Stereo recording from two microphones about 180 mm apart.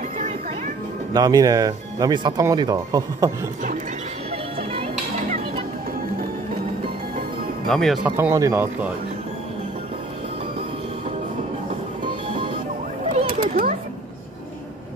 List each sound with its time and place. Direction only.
1.1 s speech: 20° right (ahead or behind)
7.6 s speech: centre (ahead or behind)
8.2 s speech: 15° right (ahead or behind)
13.0 s a sound: 35° right (ahead or behind)